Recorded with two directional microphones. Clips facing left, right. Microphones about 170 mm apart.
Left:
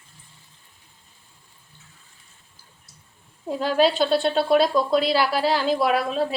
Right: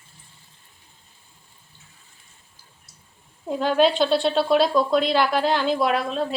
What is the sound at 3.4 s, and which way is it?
A woman's voice, centre (ahead or behind).